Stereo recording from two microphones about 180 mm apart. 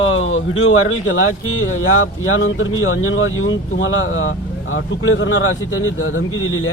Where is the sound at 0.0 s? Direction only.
90° left.